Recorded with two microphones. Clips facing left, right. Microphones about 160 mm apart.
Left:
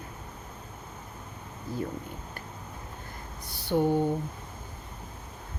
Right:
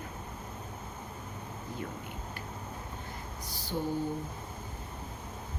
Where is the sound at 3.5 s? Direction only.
65° left (ahead or behind).